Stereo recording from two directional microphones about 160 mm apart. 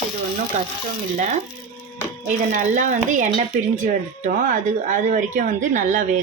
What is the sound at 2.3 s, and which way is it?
A woman's voice, 50° right (ahead or behind).